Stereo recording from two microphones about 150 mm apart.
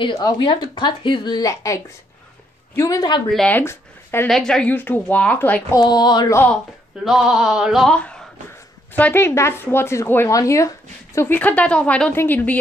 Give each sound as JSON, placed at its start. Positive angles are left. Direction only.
{"t": 0.0, "sound": "a woman's voice", "side_deg": 30}
{"t": 3.3, "sound": "speech", "side_deg": 5}
{"t": 4.3, "sound": "speech", "side_deg": 5}
{"t": 5.8, "sound": "a woman's voice", "side_deg": 25}
{"t": 6.3, "sound": "speech", "side_deg": 10}
{"t": 7.1, "sound": "a sound", "side_deg": -5}
{"t": 8.9, "sound": "speech", "side_deg": 15}